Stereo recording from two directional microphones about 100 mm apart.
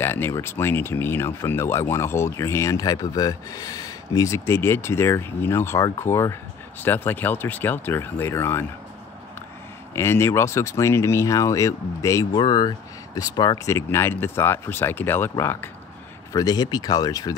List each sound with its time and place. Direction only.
0.0 s speech: 25° left (ahead or behind)
9.9 s speech: 25° left (ahead or behind)
12.4 s speech: 45° left (ahead or behind)
13.7 s speech: 25° left (ahead or behind)
16.3 s speech: 40° left (ahead or behind)